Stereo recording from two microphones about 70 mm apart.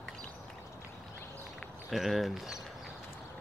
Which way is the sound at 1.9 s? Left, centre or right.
Centre.